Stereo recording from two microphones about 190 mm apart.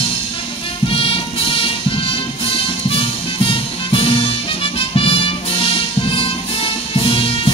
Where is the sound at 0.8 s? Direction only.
30° left (ahead or behind).